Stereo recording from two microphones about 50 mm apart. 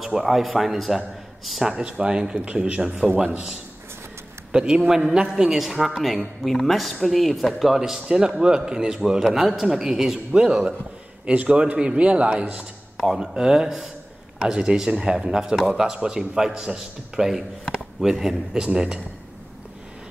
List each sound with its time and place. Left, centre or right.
0.0 s a man's voice: centre
1.9 s a man's voice: centre
12.9 s a sound: centre
13.2 s a man's voice: centre